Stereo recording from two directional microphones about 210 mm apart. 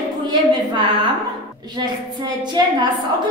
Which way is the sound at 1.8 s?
20° right (ahead or behind).